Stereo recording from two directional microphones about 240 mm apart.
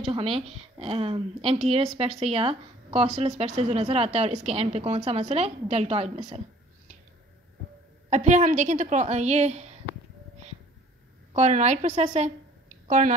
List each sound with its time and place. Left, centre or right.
0.1 s a woman's voice: right
8.1 s a woman's voice: right
11.3 s a woman's voice: right